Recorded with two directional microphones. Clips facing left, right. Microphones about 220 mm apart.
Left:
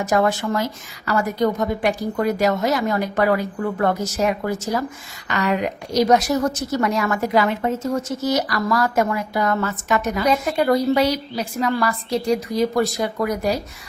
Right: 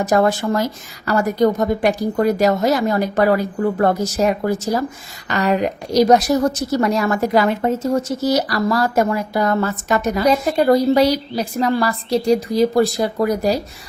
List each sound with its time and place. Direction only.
0.1 s a woman's voice: 35° right (ahead or behind)